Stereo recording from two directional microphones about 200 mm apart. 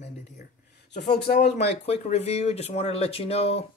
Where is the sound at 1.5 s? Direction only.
35° left (ahead or behind).